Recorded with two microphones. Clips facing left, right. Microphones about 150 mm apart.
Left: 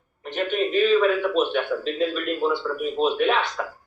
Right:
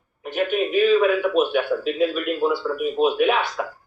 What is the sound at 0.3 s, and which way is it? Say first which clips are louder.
A man's voice: right 2 dB; 5° right (ahead or behind).